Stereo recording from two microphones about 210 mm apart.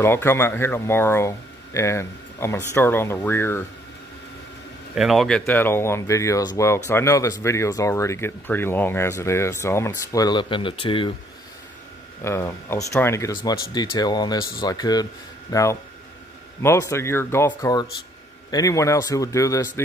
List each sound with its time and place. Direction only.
0.0 s speech: 10° left (ahead or behind)
4.9 s a man's voice: centre (ahead or behind); by 11.1 s 25° left (ahead or behind)
12.2 s speech: 10° left (ahead or behind)